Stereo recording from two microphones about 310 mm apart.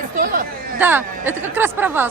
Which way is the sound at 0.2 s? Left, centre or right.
Right.